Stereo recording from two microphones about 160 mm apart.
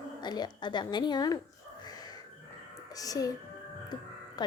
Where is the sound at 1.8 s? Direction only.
25° left (ahead or behind).